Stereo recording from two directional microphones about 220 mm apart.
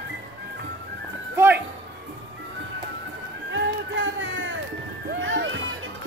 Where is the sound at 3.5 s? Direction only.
60° right (ahead or behind).